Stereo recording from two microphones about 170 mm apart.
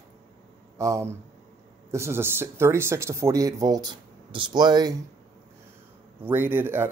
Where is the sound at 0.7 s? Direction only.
15° right (ahead or behind).